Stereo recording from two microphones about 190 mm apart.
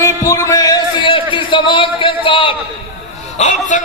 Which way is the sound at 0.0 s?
15° left (ahead or behind).